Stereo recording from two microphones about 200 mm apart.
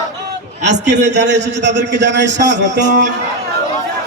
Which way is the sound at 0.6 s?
60° right (ahead or behind).